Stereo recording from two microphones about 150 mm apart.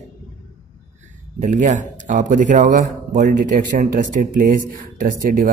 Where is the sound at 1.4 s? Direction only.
55° right (ahead or behind).